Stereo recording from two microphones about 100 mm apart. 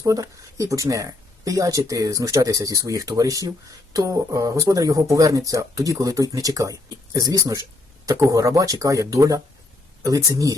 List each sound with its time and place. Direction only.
0.0 s speech: 35° right (ahead or behind)